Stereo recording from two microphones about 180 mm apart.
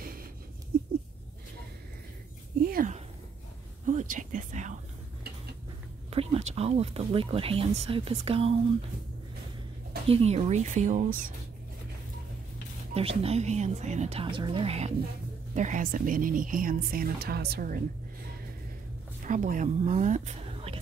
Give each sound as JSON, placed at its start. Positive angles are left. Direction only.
{"t": 2.7, "sound": "a sound", "side_deg": -50}
{"t": 3.8, "sound": "speech", "side_deg": -45}
{"t": 6.0, "sound": "speech", "side_deg": -35}
{"t": 10.0, "sound": "speech", "side_deg": -35}
{"t": 12.9, "sound": "speech", "side_deg": -35}
{"t": 19.2, "sound": "a woman's voice", "side_deg": -45}